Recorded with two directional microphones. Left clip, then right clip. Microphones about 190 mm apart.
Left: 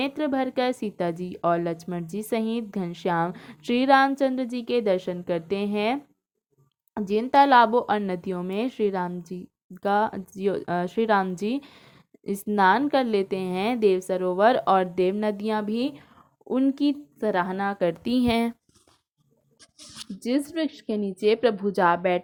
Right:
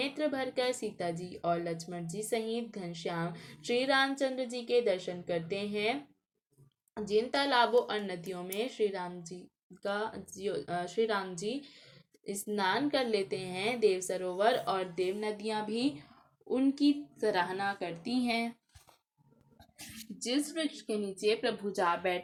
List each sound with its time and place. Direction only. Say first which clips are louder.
0.0 s a woman's voice: left 7 dB; 45° left (ahead or behind)
20.1 s a woman's voice: left 7 dB; 45° left (ahead or behind)